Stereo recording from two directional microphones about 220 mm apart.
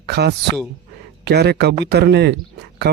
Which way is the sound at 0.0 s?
50° right (ahead or behind).